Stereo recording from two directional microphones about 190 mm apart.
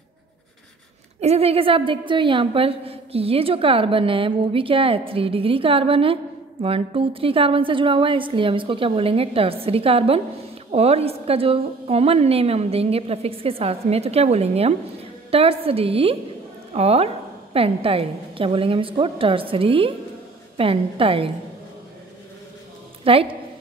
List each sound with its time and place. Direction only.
1.2 s a woman's voice: 30° right (ahead or behind)
23.0 s a woman's voice: 30° right (ahead or behind)